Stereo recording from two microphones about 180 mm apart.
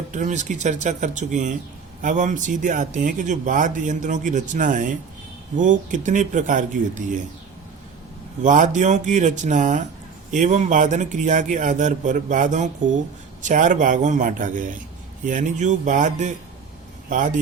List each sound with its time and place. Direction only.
0.1 s speech: 40° right (ahead or behind)
8.4 s speech: 45° right (ahead or behind)